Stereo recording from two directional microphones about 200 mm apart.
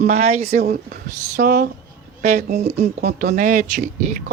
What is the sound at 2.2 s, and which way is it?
A woman's voice, 35° right (ahead or behind).